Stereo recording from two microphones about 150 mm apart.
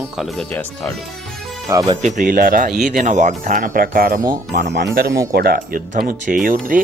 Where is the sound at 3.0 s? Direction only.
55° right (ahead or behind); by 4.2 s 75° right (ahead or behind).